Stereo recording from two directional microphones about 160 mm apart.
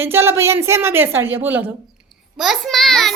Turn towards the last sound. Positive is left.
turn(degrees=0)  # may be behind; listen again after turning